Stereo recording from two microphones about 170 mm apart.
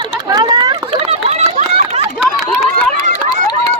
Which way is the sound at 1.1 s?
40° right (ahead or behind).